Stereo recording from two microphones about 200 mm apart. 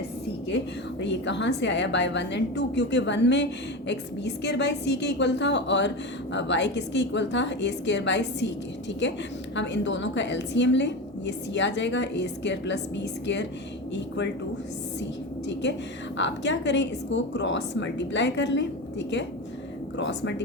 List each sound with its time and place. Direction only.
1.0 s a woman's voice: 60° left (ahead or behind)
16.1 s a woman's voice: 65° left (ahead or behind)